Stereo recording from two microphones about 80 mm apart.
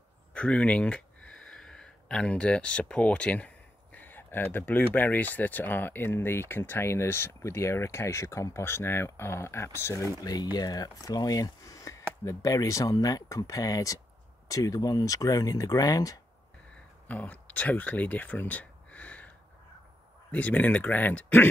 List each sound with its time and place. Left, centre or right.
0.3 s speech: centre; by 10.0 s left
10.2 s speech: left
17.1 s speech: centre